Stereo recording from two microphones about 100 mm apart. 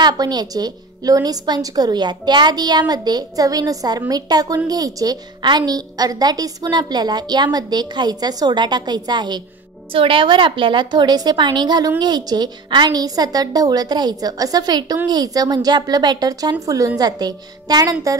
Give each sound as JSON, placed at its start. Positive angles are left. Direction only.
{"t": 0.0, "sound": "a woman's voice", "side_deg": -45}
{"t": 9.9, "sound": "a woman's voice", "side_deg": -60}